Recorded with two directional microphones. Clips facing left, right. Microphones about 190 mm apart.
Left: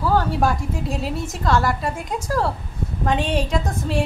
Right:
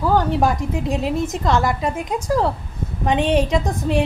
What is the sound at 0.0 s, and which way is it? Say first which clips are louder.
A woman's voice: right 2 dB; 20° right (ahead or behind).